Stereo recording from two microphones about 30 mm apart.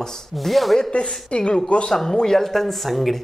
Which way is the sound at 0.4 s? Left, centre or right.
Centre.